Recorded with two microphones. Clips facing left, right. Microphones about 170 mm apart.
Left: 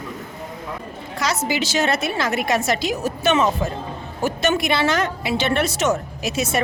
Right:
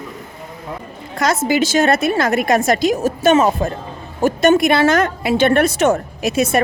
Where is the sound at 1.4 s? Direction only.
50° right (ahead or behind).